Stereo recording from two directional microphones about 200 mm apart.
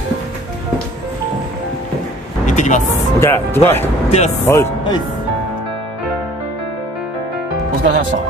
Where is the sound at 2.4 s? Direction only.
35° left (ahead or behind).